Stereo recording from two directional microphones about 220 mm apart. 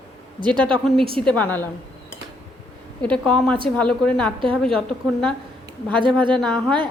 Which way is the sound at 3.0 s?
5° left (ahead or behind).